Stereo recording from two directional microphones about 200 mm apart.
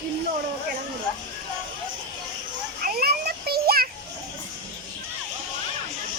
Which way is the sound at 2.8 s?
50° right (ahead or behind).